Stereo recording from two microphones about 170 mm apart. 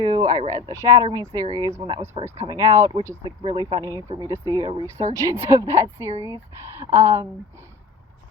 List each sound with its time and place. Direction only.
0.0 s speech: 20° right (ahead or behind)